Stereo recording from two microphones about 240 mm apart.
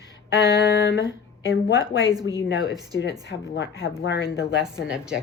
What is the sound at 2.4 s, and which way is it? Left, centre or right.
Speech, left.